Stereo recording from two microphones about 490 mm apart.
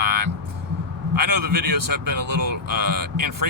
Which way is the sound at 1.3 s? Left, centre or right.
Right.